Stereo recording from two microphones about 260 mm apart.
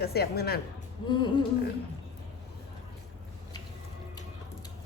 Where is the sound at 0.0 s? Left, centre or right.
Left.